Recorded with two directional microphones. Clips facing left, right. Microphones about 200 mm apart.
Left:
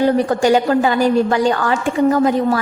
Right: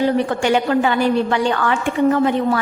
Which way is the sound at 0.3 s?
40° left (ahead or behind).